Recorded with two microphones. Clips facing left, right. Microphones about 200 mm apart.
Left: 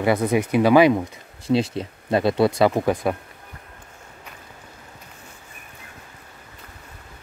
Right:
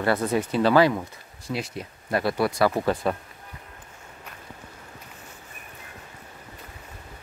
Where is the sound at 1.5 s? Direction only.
25° left (ahead or behind).